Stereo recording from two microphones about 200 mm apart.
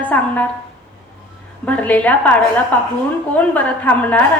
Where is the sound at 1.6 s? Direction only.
5° left (ahead or behind).